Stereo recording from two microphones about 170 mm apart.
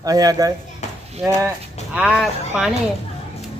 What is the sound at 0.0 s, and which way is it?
Speech, 20° right (ahead or behind).